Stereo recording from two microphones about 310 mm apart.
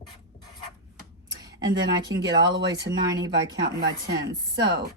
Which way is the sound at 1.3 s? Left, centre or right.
Centre.